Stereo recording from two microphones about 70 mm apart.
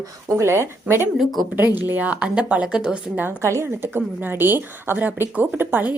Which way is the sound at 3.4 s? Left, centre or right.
Right.